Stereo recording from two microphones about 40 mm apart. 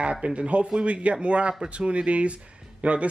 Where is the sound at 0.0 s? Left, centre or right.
Right.